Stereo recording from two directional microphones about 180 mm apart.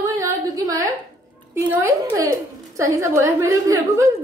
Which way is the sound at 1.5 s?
15° right (ahead or behind).